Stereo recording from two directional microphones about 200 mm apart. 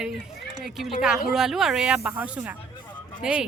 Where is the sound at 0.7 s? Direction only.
Centre (ahead or behind).